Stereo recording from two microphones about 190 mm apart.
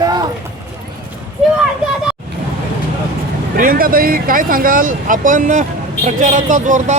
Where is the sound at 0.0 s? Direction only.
20° right (ahead or behind).